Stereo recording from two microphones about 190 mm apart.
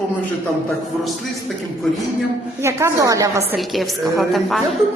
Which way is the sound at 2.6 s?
15° right (ahead or behind).